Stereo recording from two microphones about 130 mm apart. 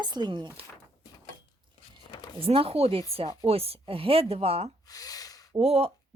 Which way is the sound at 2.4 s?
45° right (ahead or behind).